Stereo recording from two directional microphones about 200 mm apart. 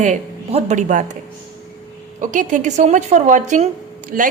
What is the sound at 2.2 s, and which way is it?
A woman's voice, 40° right (ahead or behind).